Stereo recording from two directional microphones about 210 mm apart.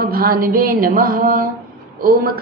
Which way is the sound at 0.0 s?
45° right (ahead or behind).